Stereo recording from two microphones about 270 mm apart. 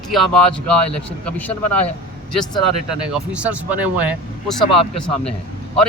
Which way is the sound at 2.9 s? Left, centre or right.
Centre.